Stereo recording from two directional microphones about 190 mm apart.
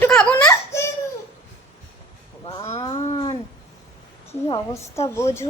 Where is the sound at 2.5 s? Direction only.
30° left (ahead or behind).